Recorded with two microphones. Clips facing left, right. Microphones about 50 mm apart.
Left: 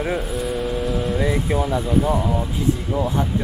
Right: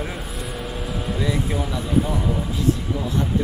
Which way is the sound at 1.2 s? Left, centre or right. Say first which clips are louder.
Even; left.